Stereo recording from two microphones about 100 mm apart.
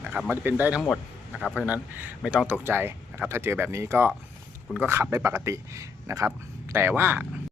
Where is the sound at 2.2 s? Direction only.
5° right (ahead or behind).